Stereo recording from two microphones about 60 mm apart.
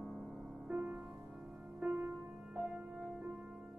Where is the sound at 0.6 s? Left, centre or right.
Centre.